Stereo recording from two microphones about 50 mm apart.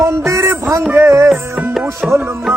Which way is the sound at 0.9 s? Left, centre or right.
Right.